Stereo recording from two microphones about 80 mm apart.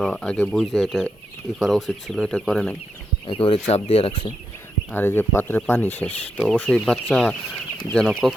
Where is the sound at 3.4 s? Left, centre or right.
Left.